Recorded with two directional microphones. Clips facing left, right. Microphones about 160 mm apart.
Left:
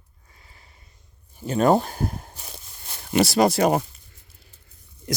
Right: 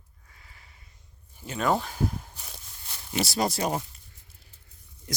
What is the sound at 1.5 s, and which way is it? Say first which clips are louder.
Speech: left 8 dB; 45° left (ahead or behind).